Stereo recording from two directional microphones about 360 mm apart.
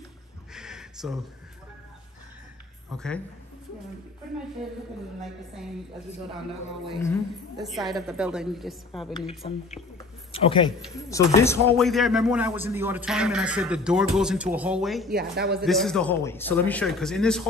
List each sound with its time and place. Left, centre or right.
0.5 s a sound: centre
2.9 s speech: centre
6.9 s a woman's voice: centre
10.3 s speech: centre
15.1 s speech: right
15.6 s speech: centre